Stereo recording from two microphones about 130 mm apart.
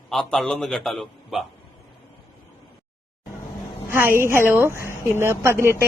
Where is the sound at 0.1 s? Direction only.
5° left (ahead or behind).